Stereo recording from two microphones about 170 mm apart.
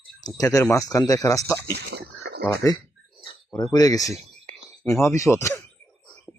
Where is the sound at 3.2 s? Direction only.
25° left (ahead or behind).